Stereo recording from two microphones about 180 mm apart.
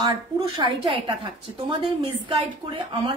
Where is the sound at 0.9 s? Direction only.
30° right (ahead or behind).